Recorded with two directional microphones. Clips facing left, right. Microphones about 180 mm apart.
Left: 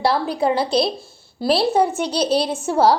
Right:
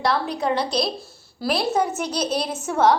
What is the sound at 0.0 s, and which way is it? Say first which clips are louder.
A woman's voice: left 4 dB; 30° left (ahead or behind).